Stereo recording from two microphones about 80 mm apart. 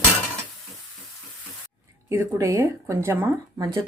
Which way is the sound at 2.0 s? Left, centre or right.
Right.